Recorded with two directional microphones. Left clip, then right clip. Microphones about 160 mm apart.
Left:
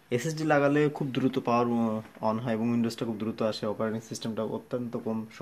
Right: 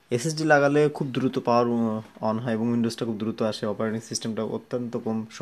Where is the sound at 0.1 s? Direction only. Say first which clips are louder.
Right 5 dB; 50° right (ahead or behind).